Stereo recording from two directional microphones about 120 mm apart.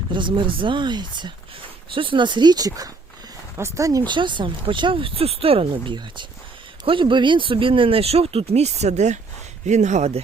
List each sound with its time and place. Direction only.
0.1 s speech: 40° right (ahead or behind); by 10.2 s 75° right (ahead or behind)